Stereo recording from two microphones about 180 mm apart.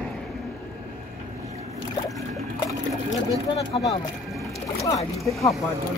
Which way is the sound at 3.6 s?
25° left (ahead or behind).